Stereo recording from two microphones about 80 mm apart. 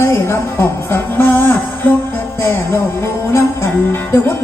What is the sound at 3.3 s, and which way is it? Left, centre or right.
Music, left.